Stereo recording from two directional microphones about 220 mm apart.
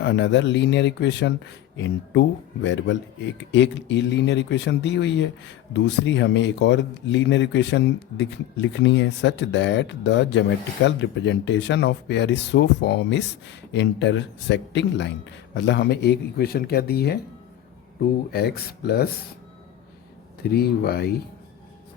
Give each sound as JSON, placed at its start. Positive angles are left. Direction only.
{"t": 0.0, "sound": "speech", "side_deg": 50}
{"t": 20.4, "sound": "speech", "side_deg": 45}